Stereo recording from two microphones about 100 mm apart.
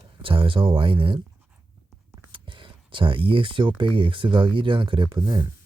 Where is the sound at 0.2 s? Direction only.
60° right (ahead or behind).